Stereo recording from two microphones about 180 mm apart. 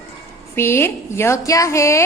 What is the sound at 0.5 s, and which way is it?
A woman's voice, 15° left (ahead or behind).